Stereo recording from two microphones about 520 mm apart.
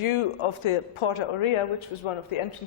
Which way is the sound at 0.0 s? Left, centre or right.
Left.